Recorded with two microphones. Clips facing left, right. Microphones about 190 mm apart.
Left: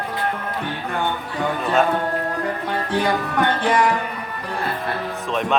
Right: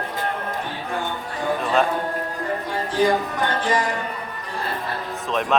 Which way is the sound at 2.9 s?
60° left (ahead or behind).